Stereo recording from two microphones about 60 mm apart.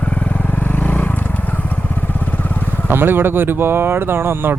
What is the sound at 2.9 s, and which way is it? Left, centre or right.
Speech, right.